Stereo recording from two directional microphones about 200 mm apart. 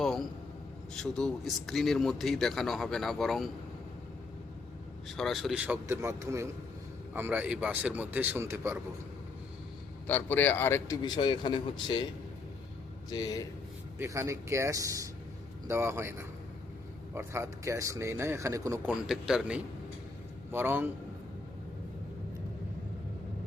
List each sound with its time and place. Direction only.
0.0 s a sound: centre (ahead or behind)
0.9 s speech: centre (ahead or behind)
5.0 s speech: centre (ahead or behind)
10.1 s a man's voice: 10° left (ahead or behind)
13.1 s speech: 20° left (ahead or behind)
14.0 s speech: 15° right (ahead or behind)